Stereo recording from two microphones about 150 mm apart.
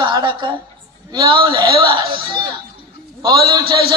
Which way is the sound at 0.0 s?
30° right (ahead or behind).